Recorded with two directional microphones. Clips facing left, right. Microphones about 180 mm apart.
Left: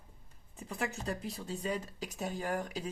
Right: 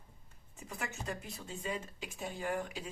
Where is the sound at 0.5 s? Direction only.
35° left (ahead or behind).